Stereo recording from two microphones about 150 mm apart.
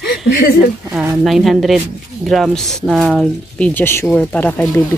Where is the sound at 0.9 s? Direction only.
Centre (ahead or behind).